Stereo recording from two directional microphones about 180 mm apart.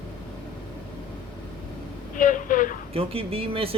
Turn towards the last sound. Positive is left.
turn(degrees=-30)  # may be behind; listen again after turning